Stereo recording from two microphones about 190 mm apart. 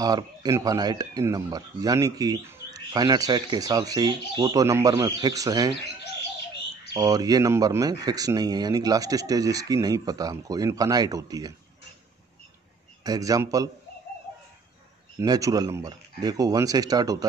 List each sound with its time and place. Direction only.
0.0 s speech: 20° right (ahead or behind)
6.9 s speech: 20° right (ahead or behind)
13.0 s speech: 20° right (ahead or behind)
15.1 s speech: 20° right (ahead or behind)